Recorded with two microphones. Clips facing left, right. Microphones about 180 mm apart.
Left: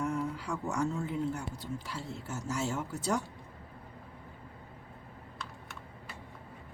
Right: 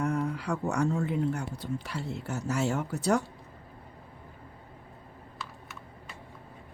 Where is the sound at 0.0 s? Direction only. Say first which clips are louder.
Right 4 dB; 70° right (ahead or behind).